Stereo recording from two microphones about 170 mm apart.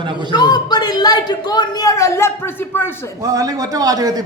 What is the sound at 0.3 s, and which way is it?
Speech, 25° left (ahead or behind).